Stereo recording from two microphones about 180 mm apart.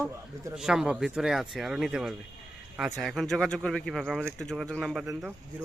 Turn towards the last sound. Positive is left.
turn(degrees=0)  # may be behind; listen again after turning